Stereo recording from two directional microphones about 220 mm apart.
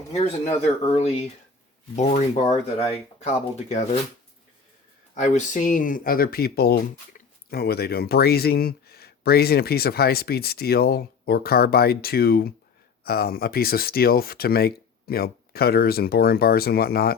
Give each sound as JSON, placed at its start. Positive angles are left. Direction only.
{"t": 0.1, "sound": "speech", "side_deg": 30}
{"t": 5.1, "sound": "speech", "side_deg": 35}
{"t": 7.1, "sound": "a sound", "side_deg": 40}
{"t": 7.5, "sound": "speech", "side_deg": 45}